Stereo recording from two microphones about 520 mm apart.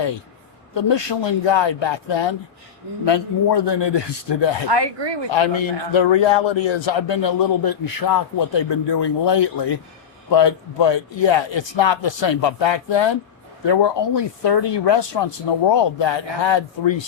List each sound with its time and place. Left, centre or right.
0.7 s a man's voice: left
4.7 s speech: right
5.3 s a man's voice: left